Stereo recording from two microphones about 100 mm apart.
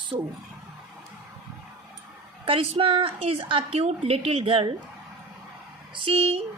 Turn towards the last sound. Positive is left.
turn(degrees=-75)  # may be behind; listen again after turning